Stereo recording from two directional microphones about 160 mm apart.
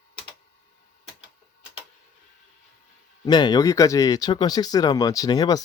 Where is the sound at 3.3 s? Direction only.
25° left (ahead or behind).